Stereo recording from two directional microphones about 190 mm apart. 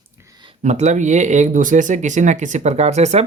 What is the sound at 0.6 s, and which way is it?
Speech, 40° right (ahead or behind).